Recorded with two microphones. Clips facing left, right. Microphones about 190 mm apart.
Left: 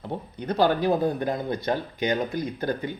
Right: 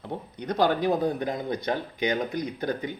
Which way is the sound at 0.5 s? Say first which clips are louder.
Left 2 dB; 20° right (ahead or behind).